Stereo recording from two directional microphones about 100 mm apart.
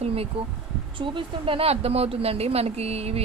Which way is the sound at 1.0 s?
60° right (ahead or behind).